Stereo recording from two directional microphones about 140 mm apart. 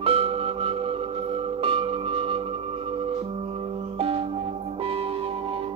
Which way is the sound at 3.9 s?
40° right (ahead or behind).